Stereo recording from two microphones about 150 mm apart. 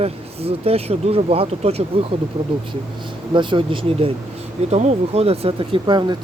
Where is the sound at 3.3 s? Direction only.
30° right (ahead or behind).